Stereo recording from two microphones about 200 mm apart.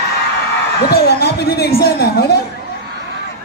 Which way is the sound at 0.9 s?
50° left (ahead or behind).